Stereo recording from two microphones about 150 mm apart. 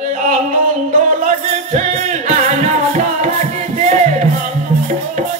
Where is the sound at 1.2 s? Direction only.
50° right (ahead or behind).